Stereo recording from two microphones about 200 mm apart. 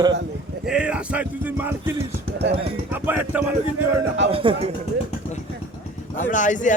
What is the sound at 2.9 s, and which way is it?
Speech, 10° right (ahead or behind).